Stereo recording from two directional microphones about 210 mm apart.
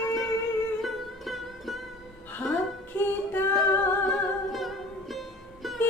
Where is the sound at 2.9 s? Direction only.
10° left (ahead or behind).